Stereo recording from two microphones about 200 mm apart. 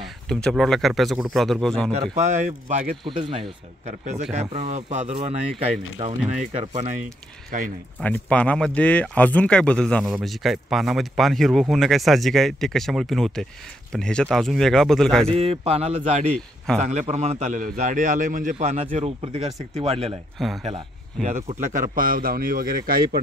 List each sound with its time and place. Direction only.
0.0 s speech: 5° left (ahead or behind)
2.1 s a man's voice: 35° right (ahead or behind)
3.0 s a man's voice: 25° right (ahead or behind)
6.0 s speech: 20° right (ahead or behind)
7.5 s a man's voice: 40° right (ahead or behind)
8.0 s speech: 5° left (ahead or behind)
15.2 s a man's voice: 30° right (ahead or behind)
20.3 s speech: centre (ahead or behind)
20.6 s a man's voice: 35° right (ahead or behind)